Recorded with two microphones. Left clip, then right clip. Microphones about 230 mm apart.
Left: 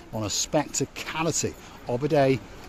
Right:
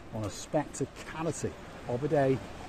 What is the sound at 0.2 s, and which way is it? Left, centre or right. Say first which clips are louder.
Speech: left 7 dB; left.